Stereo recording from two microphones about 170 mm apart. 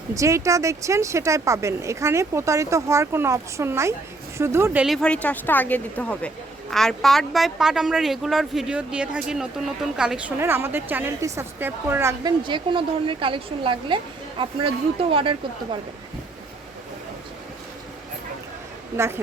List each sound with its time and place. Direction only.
0.1 s speech: 20° right (ahead or behind)
4.9 s a woman's voice: 5° left (ahead or behind); by 12.3 s 15° right (ahead or behind)
12.4 s a woman's voice: 30° right (ahead or behind)
18.9 s speech: 15° right (ahead or behind)